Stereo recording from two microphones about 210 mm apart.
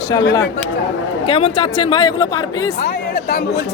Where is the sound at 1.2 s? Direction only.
25° left (ahead or behind).